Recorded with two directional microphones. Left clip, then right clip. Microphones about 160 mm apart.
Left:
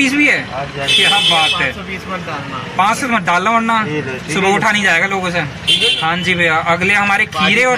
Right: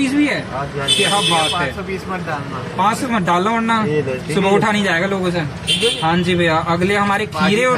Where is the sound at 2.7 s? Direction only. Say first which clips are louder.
Left 3 dB; 20° left (ahead or behind).